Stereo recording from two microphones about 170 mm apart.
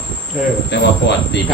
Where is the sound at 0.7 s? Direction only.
90° left.